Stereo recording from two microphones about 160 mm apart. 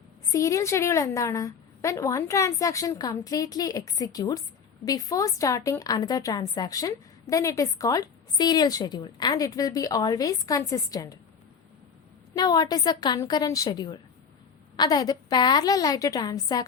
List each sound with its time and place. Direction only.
0.3 s a woman's voice: 20° left (ahead or behind)
12.3 s a woman's voice: 25° left (ahead or behind)